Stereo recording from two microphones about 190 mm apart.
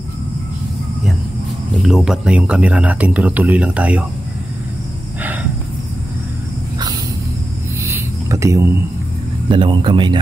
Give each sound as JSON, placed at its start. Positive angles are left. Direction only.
{"t": 1.8, "sound": "speech", "side_deg": 0}
{"t": 7.8, "sound": "a sound", "side_deg": -15}
{"t": 9.5, "sound": "speech", "side_deg": -25}